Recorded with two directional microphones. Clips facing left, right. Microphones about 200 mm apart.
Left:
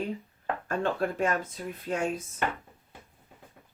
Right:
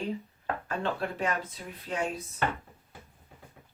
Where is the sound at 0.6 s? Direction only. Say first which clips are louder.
Left 4 dB; 45° left (ahead or behind).